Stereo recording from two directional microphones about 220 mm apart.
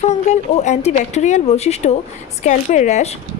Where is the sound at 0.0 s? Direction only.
30° left (ahead or behind).